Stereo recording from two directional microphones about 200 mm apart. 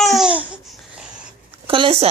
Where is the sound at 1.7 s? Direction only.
25° right (ahead or behind).